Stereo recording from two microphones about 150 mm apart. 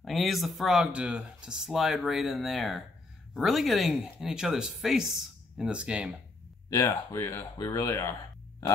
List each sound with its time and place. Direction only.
0.0 s speech: centre (ahead or behind)
6.7 s speech: 20° left (ahead or behind)